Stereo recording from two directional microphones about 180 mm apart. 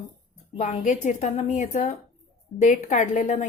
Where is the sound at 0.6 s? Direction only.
45° left (ahead or behind).